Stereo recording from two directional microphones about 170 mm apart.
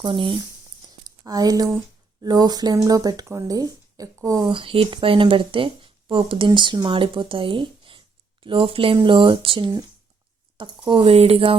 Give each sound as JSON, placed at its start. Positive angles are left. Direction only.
{"t": 0.0, "sound": "speech", "side_deg": -30}